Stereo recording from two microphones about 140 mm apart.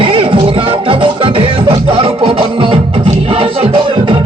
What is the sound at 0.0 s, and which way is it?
Music, 40° right (ahead or behind).